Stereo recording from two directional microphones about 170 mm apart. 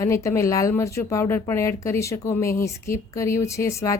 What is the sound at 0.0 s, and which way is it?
A woman's voice, 15° left (ahead or behind).